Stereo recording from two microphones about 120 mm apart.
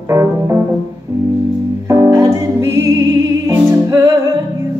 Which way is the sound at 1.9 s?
25° right (ahead or behind).